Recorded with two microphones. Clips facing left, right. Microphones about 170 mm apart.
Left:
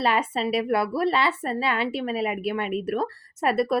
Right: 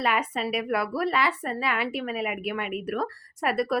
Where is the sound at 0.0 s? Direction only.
30° left (ahead or behind).